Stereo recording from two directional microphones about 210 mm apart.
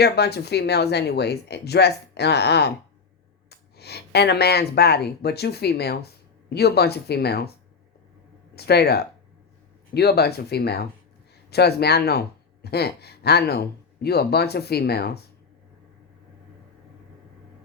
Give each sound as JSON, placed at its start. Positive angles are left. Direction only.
{"t": 0.0, "sound": "speech", "side_deg": 50}
{"t": 8.5, "sound": "speech", "side_deg": 50}